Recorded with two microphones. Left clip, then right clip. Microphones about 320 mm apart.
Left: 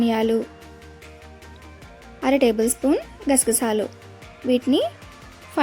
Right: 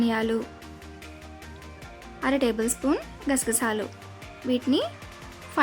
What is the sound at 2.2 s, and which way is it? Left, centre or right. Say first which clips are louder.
A woman's voice: left 6 dB; centre.